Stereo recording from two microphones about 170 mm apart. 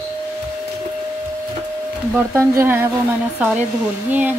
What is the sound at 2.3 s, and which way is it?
Speech, 15° right (ahead or behind).